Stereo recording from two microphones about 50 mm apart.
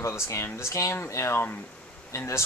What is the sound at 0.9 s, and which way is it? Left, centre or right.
Speech, left.